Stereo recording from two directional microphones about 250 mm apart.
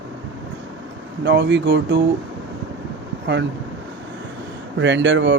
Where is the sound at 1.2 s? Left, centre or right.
Right.